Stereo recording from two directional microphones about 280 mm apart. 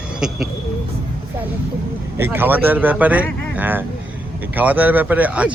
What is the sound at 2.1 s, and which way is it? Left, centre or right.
A man's voice, centre.